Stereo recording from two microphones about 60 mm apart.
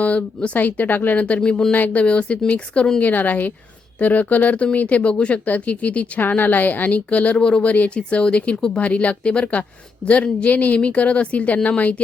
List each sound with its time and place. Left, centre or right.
0.0 s speech: left
1.4 s speech: centre
1.7 s speech: left
3.0 s speech: left